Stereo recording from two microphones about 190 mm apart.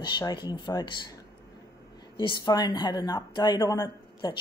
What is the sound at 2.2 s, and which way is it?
A woman's voice, 25° left (ahead or behind).